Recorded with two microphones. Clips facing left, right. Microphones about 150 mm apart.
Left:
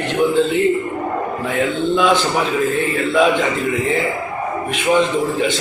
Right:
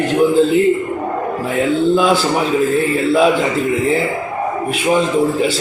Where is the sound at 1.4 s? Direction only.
35° right (ahead or behind).